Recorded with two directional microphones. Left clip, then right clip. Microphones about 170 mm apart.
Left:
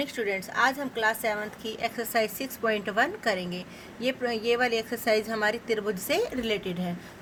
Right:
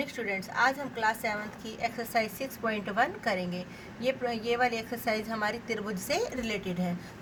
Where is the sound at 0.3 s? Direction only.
55° left (ahead or behind).